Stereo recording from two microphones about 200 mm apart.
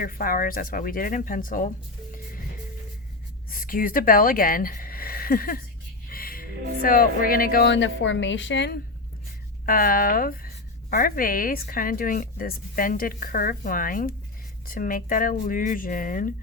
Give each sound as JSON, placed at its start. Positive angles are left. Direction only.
{"t": 0.0, "sound": "speech", "side_deg": 45}
{"t": 3.5, "sound": "speech", "side_deg": 45}
{"t": 6.1, "sound": "music", "side_deg": 45}
{"t": 6.8, "sound": "a woman's voice", "side_deg": 45}
{"t": 9.6, "sound": "speech", "side_deg": 45}